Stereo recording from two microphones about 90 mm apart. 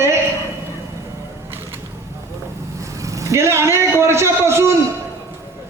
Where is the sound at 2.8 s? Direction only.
35° right (ahead or behind).